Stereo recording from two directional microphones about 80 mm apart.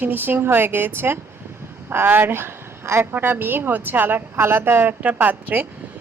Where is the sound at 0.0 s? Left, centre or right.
Right.